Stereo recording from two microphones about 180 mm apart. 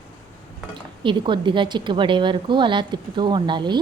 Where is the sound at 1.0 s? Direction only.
25° right (ahead or behind).